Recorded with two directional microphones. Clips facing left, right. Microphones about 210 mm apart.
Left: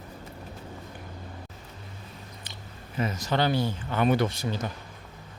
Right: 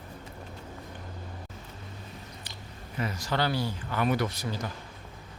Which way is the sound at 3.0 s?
20° left (ahead or behind).